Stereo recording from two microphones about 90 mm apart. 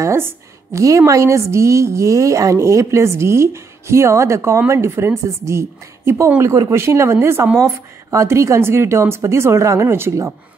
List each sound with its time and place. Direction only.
0.0 s a woman's voice: 30° right (ahead or behind)